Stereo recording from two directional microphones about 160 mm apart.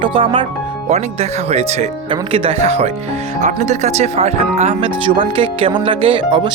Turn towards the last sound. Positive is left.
turn(degrees=-30)  # may be behind; listen again after turning